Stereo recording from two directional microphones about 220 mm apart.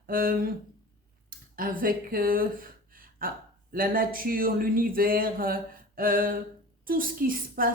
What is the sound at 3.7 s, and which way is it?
Speech, 40° right (ahead or behind).